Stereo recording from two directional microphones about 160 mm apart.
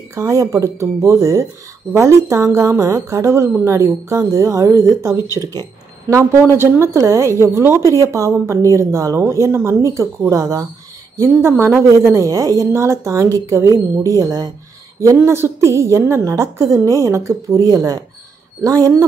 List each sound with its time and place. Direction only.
0.1 s a woman's voice: 20° right (ahead or behind)